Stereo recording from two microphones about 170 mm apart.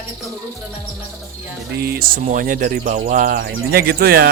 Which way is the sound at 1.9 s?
55° right (ahead or behind).